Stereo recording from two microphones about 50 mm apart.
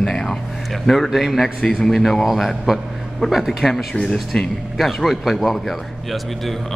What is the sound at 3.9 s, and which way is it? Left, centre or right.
Speech, centre.